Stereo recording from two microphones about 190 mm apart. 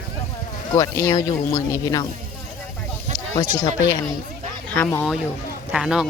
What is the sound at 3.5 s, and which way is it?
Speech, 15° left (ahead or behind).